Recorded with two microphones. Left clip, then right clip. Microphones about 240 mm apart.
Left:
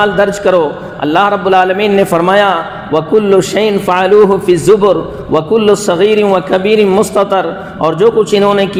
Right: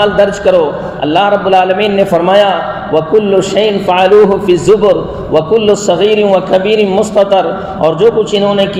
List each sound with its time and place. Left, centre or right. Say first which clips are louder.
0.0 s a man's voice: right 1 dB; left